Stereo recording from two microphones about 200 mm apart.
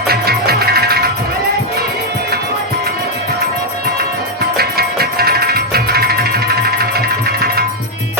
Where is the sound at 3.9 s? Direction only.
50° right (ahead or behind).